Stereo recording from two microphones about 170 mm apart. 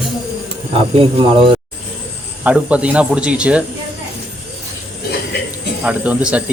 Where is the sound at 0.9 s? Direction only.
30° right (ahead or behind).